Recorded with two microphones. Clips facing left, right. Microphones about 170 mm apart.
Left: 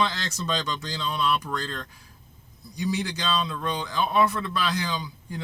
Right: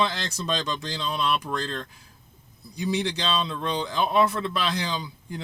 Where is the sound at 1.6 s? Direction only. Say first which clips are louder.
Right 3 dB; 25° right (ahead or behind).